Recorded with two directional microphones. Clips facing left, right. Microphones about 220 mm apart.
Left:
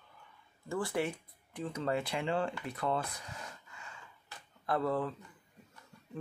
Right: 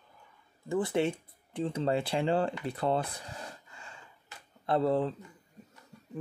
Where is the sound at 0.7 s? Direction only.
20° right (ahead or behind).